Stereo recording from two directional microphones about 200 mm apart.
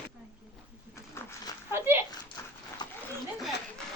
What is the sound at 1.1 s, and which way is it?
Dog, 15° left (ahead or behind).